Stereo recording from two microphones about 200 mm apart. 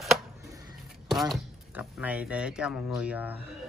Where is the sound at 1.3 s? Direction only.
5° right (ahead or behind).